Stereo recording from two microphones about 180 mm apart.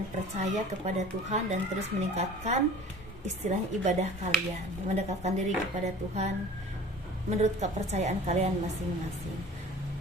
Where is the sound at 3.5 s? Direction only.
40° right (ahead or behind).